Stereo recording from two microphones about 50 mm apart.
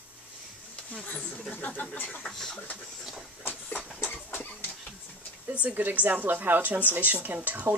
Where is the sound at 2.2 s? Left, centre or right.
Centre.